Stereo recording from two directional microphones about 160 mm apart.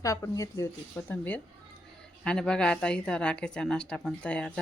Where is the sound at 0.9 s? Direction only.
10° left (ahead or behind).